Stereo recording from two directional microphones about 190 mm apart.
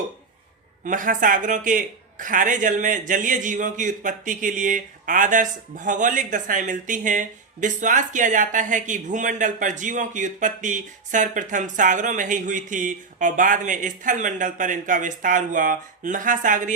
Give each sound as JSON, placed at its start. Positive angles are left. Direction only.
{"t": 0.9, "sound": "speech", "side_deg": -45}